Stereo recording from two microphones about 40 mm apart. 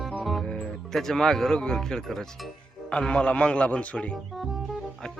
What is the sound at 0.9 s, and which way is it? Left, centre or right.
Speech, centre.